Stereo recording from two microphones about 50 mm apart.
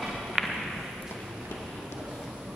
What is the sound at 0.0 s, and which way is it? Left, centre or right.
Thump, centre.